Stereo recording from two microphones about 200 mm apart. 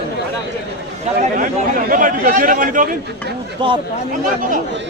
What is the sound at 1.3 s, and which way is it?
A man's voice, 40° right (ahead or behind).